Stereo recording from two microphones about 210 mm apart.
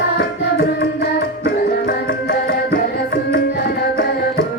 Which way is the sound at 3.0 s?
50° left (ahead or behind).